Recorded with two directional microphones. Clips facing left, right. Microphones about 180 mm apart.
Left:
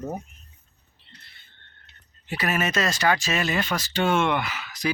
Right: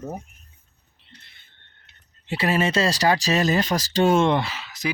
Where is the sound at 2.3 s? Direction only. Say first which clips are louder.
Right 4 dB; 30° right (ahead or behind).